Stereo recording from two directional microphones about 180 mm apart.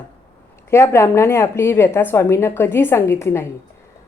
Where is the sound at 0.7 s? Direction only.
15° left (ahead or behind).